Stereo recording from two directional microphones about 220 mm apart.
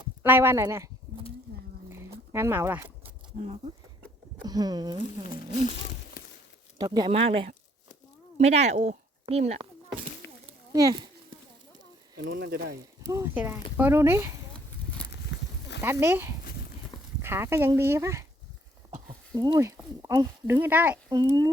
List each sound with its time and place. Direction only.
0.0 s speech: 10° right (ahead or behind)
1.9 s a sound: 10° right (ahead or behind)
4.4 s speech: 15° right (ahead or behind)
5.3 s speech: 35° left (ahead or behind)
6.2 s a sound: 40° left (ahead or behind)
6.7 s speech: 20° right (ahead or behind)
10.2 s a sound: 50° left (ahead or behind)
10.7 s speech: 15° right (ahead or behind)
12.3 s speech: 45° right (ahead or behind)
13.1 s speech: 10° right (ahead or behind)
15.3 s a sound: 55° left (ahead or behind)
15.8 s speech: 10° right (ahead or behind)
19.5 s speech: 15° right (ahead or behind)